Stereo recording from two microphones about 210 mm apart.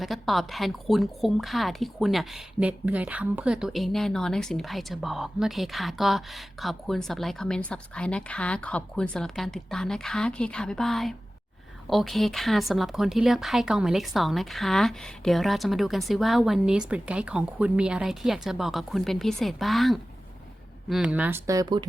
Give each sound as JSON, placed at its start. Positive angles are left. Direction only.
{"t": 0.0, "sound": "speech", "side_deg": 0}